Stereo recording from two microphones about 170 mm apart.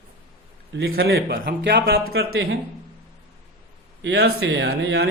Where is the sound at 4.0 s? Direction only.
85° right.